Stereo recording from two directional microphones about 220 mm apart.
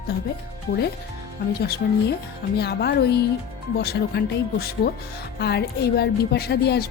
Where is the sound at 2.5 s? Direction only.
50° left (ahead or behind).